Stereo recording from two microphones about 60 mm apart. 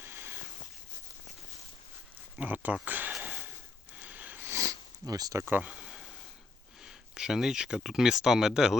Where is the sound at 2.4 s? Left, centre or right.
Right.